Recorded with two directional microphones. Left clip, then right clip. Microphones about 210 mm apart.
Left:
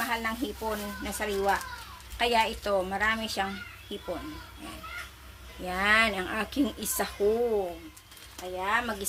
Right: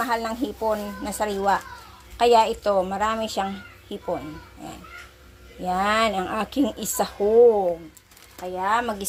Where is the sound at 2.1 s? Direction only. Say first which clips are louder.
Right 8 dB; 20° right (ahead or behind).